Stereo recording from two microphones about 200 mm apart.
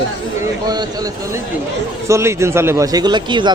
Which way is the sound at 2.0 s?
15° right (ahead or behind).